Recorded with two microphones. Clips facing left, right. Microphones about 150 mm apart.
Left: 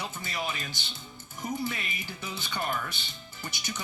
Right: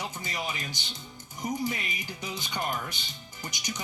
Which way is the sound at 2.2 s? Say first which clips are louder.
Right 1 dB; 15° right (ahead or behind).